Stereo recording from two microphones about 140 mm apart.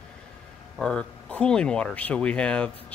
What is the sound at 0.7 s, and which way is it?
Speech, 5° left (ahead or behind).